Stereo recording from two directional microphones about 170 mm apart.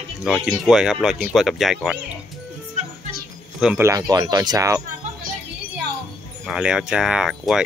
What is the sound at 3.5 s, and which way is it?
Speech, 5° right (ahead or behind).